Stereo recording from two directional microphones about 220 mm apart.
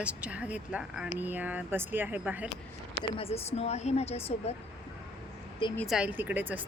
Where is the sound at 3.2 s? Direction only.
25° left (ahead or behind).